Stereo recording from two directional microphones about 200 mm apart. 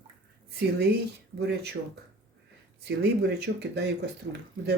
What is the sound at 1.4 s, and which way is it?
Speech, 55° right (ahead or behind).